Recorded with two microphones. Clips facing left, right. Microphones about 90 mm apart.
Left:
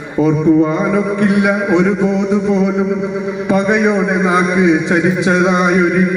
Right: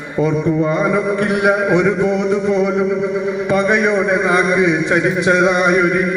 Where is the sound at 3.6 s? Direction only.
10° left (ahead or behind).